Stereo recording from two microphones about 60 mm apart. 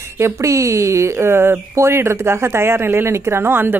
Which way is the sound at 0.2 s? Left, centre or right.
Right.